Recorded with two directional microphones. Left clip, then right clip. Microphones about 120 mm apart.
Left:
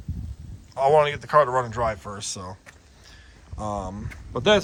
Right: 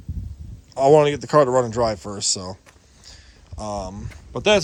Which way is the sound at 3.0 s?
40° right (ahead or behind).